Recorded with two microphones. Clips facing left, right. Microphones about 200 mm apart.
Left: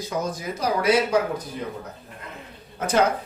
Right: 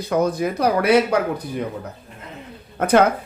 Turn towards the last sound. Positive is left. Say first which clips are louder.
# right 6 dB
turn(degrees=-55)  # may be behind; listen again after turning